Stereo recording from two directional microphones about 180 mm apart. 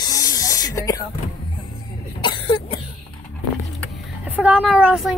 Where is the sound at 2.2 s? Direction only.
25° left (ahead or behind).